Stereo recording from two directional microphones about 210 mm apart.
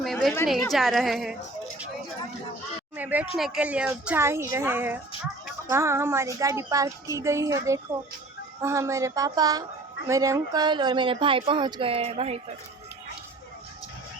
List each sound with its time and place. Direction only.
0.0 s a sound: centre (ahead or behind)
0.4 s a woman's voice: centre (ahead or behind)
2.9 s speech: 10° right (ahead or behind); by 12.4 s 30° right (ahead or behind)